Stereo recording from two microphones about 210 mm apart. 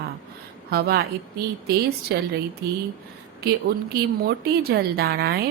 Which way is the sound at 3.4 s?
50° right (ahead or behind).